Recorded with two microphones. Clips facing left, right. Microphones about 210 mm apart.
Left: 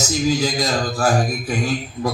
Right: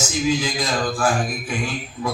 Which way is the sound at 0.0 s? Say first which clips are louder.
Left 2 dB; 40° left (ahead or behind).